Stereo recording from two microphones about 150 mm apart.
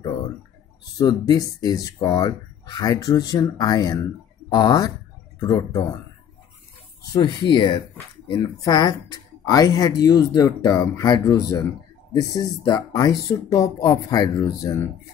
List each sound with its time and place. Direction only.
0.9 s speech: 25° left (ahead or behind)
7.1 s speech: 30° left (ahead or behind)